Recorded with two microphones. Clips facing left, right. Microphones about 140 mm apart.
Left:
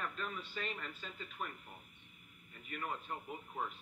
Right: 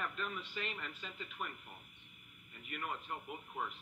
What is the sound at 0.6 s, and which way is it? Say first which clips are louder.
Speech: left 3 dB; 40° left (ahead or behind).